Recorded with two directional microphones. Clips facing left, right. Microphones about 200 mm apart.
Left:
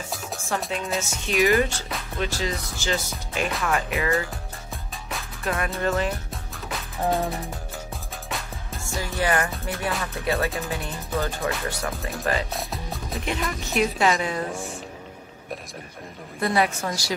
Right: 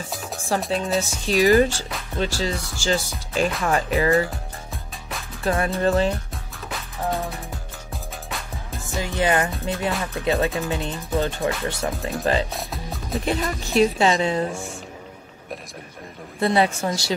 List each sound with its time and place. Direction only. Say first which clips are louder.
0.5 s speech: right 5 dB; 35° right (ahead or behind)
5.4 s music: right 5 dB; 30° right (ahead or behind)
5.8 s speech: right 5 dB; 30° right (ahead or behind)
6.7 s music: left 2 dB; centre (ahead or behind)
8.9 s music: right 3 dB; 20° right (ahead or behind)
12.5 s music: even; centre (ahead or behind)
13.2 s music: right 4 dB; 35° right (ahead or behind)
16.3 s music: right 3 dB; 25° right (ahead or behind)